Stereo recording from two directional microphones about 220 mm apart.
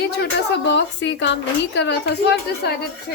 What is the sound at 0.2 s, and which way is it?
A woman's voice, 50° left (ahead or behind).